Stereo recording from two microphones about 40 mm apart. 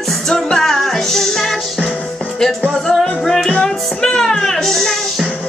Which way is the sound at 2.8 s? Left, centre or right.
Centre.